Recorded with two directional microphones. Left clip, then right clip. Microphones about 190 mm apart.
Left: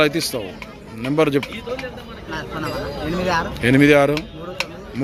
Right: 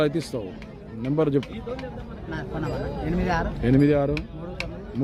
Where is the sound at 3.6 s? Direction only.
Centre (ahead or behind).